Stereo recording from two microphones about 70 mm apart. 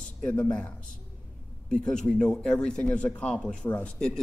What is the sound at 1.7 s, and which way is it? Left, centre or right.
Speech, centre.